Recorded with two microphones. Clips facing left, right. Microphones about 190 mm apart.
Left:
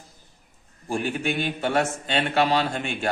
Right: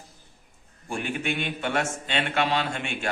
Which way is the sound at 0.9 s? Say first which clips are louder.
Left 3 dB; 40° left (ahead or behind).